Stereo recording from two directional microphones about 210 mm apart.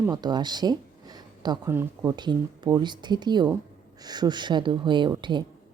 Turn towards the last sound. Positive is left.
turn(degrees=-20)  # may be behind; listen again after turning